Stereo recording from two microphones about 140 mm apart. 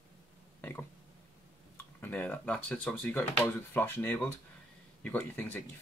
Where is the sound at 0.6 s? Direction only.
15° left (ahead or behind).